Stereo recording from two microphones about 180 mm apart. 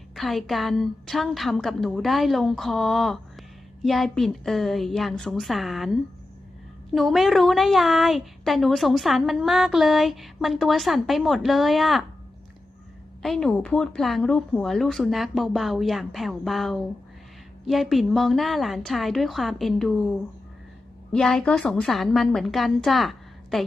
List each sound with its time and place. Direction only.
0.2 s a woman's voice: centre (ahead or behind)
13.2 s a woman's voice: centre (ahead or behind)